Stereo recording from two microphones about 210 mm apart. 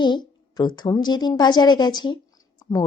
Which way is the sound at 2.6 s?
15° left (ahead or behind).